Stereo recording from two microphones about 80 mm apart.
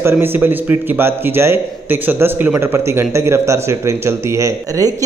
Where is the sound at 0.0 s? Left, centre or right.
Right.